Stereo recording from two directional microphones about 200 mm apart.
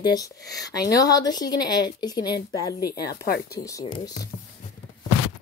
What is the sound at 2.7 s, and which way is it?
Speech, 50° left (ahead or behind).